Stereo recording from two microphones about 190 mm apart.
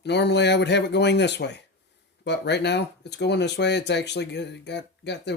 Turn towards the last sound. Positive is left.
turn(degrees=65)  # may be behind; listen again after turning